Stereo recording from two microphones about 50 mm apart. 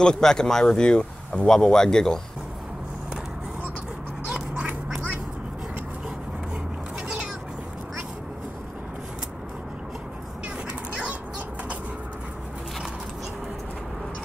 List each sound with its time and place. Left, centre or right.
0.0 s speech: centre
4.3 s duck: right
10.9 s a sound: right